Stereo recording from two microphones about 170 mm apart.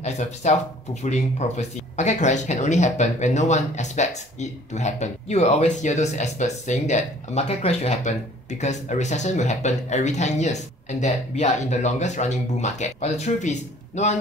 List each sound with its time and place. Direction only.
0.0 s speech: 40° left (ahead or behind)